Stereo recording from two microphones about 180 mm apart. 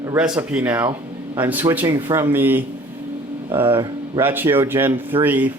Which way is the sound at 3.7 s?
25° right (ahead or behind).